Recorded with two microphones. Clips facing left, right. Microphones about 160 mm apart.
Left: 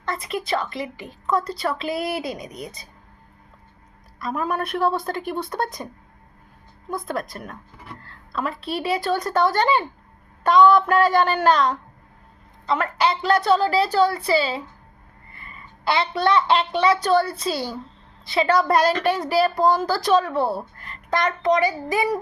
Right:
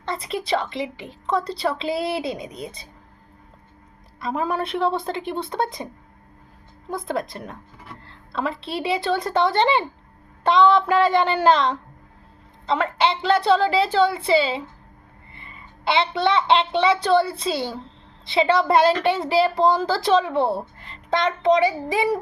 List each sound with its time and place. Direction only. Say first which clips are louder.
0.0 s a woman's voice: even; 30° right (ahead or behind)
4.2 s a woman's voice: right 1 dB; 25° right (ahead or behind)
6.9 s a woman's voice: right 1 dB; 25° right (ahead or behind)